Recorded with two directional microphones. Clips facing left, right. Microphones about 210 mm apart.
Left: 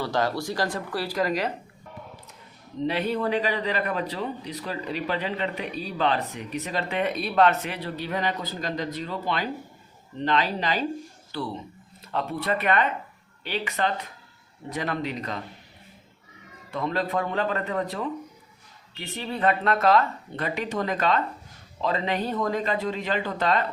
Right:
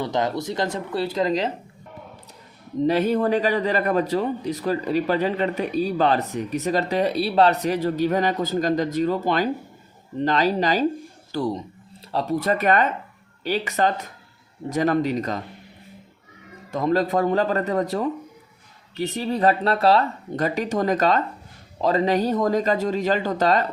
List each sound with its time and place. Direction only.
0.0 s speech: 20° right (ahead or behind)
2.8 s a man's voice: 45° right (ahead or behind)
16.7 s speech: 40° right (ahead or behind)